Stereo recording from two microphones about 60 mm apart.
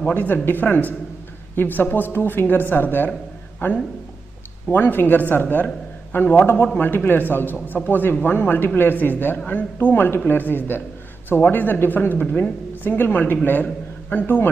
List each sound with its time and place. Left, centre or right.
0.0 s speech: left